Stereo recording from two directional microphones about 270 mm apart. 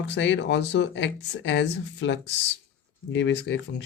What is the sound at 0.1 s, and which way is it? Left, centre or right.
Speech, left.